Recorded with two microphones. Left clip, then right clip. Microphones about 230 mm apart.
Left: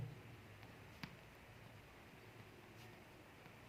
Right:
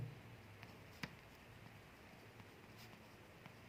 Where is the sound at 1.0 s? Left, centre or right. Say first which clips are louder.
Right 4 dB; centre.